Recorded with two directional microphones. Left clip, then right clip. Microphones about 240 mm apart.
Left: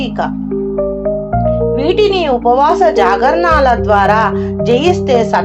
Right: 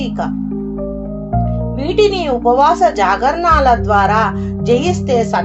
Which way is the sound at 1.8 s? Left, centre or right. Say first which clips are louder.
Even; left.